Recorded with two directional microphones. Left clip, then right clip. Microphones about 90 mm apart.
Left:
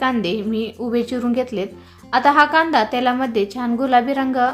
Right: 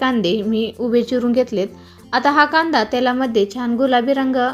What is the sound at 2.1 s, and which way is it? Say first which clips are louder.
A woman's voice: left 1 dB; 25° right (ahead or behind).